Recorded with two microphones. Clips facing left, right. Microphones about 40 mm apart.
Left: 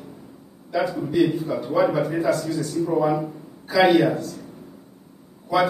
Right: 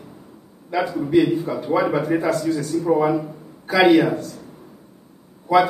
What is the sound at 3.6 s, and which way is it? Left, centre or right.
Speech, right.